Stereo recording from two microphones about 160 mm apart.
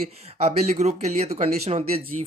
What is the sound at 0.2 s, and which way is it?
Speech, 40° right (ahead or behind).